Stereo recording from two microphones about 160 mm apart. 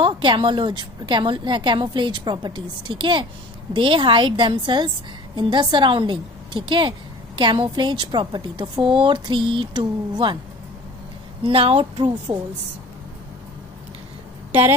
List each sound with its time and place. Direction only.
0.0 s a woman's voice: 30° right (ahead or behind)
11.4 s a woman's voice: 35° right (ahead or behind)
14.5 s a woman's voice: 15° right (ahead or behind)